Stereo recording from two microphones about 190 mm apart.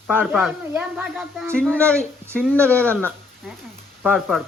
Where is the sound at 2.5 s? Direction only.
15° right (ahead or behind).